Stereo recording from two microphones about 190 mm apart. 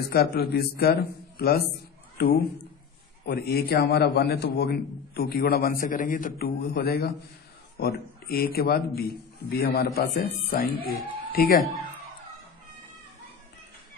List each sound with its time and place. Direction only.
0.1 s a woman's voice: 55° left (ahead or behind)